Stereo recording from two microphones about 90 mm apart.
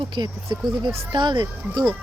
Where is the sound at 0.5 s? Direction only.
55° right (ahead or behind).